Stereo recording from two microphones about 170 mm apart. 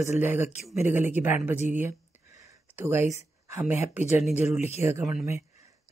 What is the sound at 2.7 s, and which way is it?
Speech, 15° right (ahead or behind).